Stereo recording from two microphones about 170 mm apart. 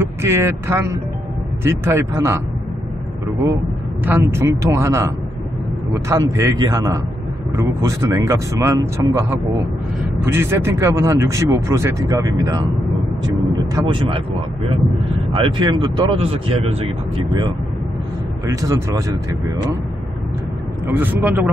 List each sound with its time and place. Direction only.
0.0 s speech: 15° right (ahead or behind)
4.0 s speech: 15° right (ahead or behind)
13.7 s speech: 30° right (ahead or behind)
15.3 s speech: 30° right (ahead or behind)
18.5 s speech: 20° right (ahead or behind)
20.8 s speech: 10° right (ahead or behind)